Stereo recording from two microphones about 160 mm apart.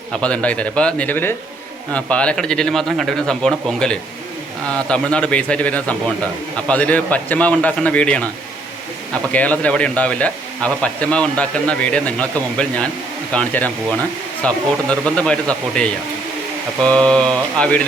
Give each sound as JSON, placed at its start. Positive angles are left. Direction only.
{"t": 0.1, "sound": "a man's voice", "side_deg": 5}
{"t": 9.3, "sound": "a man's voice", "side_deg": 10}